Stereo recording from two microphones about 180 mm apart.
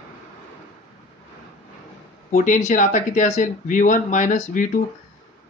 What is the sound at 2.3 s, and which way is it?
Speech, 45° left (ahead or behind).